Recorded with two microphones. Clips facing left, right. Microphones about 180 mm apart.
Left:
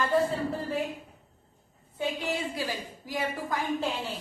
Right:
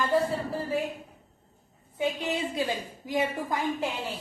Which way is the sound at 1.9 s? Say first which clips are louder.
Right 2 dB; 20° right (ahead or behind).